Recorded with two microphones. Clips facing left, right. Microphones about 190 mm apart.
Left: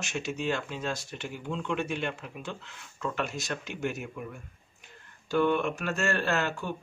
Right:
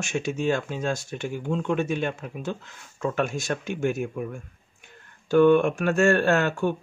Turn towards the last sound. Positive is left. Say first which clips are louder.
# right 8 dB
turn(degrees=-55)  # may be behind; listen again after turning